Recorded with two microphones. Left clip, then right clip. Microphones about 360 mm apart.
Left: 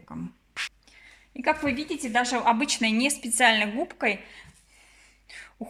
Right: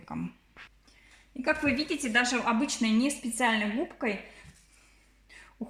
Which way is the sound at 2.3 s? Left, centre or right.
Left.